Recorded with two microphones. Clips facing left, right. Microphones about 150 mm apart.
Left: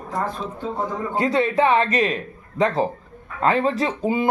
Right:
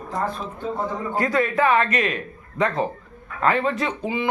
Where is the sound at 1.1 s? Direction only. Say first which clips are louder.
Left 2 dB; 30° left (ahead or behind).